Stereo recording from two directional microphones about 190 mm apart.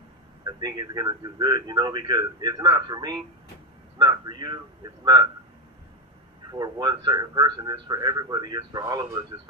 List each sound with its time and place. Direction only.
0.5 s a man's voice: 20° right (ahead or behind)
6.5 s a man's voice: 20° right (ahead or behind)